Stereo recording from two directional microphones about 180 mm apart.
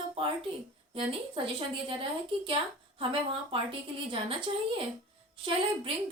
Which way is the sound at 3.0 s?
30° right (ahead or behind).